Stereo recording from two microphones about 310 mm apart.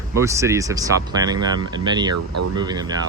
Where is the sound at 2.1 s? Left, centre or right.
Right.